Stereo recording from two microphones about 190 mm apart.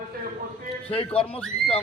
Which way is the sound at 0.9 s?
30° left (ahead or behind).